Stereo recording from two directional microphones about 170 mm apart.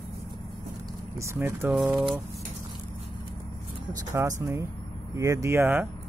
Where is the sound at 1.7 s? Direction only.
5° right (ahead or behind).